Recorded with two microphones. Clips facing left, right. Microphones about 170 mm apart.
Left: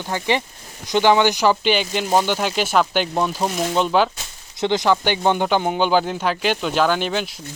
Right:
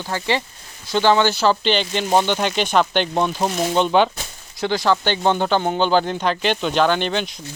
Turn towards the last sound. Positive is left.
turn(degrees=5)  # may be behind; listen again after turning